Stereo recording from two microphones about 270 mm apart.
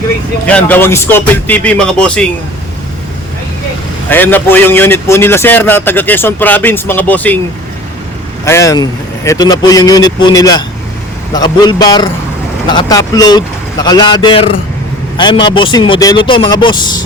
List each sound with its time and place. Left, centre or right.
0.4 s a man's voice: centre
4.1 s a man's voice: centre
8.4 s a man's voice: centre